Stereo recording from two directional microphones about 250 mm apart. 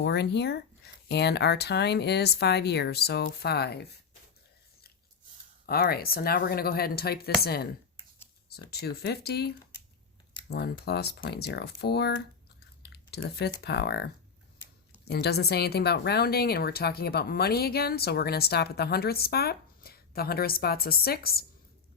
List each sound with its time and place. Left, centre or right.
0.0 s a woman's voice: left
5.6 s a woman's voice: left
8.7 s a woman's voice: left
10.5 s a woman's voice: left